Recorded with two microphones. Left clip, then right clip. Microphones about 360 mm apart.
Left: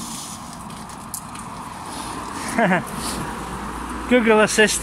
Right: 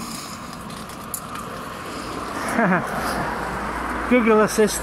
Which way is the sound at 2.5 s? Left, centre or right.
Left.